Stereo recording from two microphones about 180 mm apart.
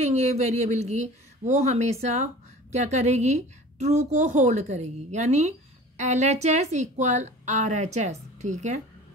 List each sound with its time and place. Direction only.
0.1 s speech: 40° right (ahead or behind)